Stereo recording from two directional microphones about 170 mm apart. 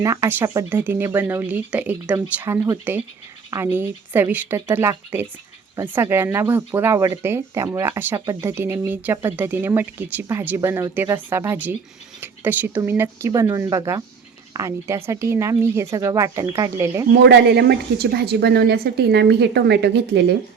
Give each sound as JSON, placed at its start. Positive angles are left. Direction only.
{"t": 0.0, "sound": "speech", "side_deg": -20}
{"t": 17.1, "sound": "a woman's voice", "side_deg": -85}